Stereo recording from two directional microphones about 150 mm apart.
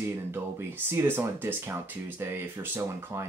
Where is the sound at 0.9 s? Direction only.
15° right (ahead or behind).